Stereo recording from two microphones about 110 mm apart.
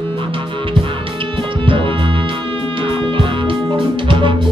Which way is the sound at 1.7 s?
50° right (ahead or behind).